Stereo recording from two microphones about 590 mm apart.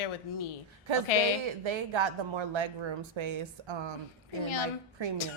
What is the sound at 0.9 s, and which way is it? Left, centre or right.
A woman's voice, right.